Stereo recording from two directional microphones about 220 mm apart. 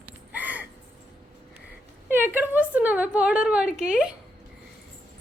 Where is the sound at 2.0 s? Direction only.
10° right (ahead or behind).